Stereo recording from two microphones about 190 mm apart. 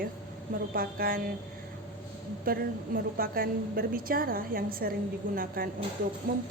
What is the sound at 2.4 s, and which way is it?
A woman's voice, 50° right (ahead or behind).